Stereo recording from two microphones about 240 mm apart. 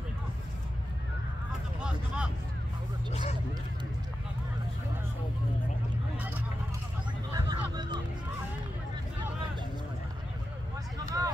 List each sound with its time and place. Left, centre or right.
1.8 s speech: centre
3.1 s speech: left
7.3 s a sound: centre
11.0 s vehicle: centre